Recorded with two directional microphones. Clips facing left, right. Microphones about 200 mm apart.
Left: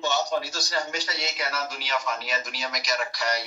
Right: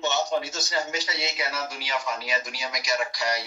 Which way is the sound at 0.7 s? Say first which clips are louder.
Right 1 dB; 5° right (ahead or behind).